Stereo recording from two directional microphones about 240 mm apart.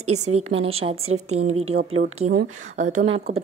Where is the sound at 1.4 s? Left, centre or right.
Right.